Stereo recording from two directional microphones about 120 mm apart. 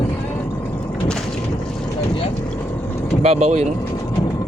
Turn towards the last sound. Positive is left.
turn(degrees=-70)  # may be behind; listen again after turning